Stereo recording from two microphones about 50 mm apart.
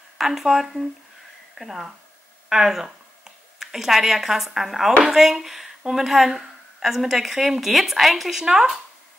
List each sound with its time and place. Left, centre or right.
0.2 s a woman's voice: centre
2.5 s a sound: centre
4.6 s a woman's voice: centre